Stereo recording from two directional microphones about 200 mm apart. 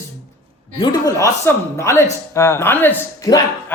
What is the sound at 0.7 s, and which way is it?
A man's voice, 20° left (ahead or behind).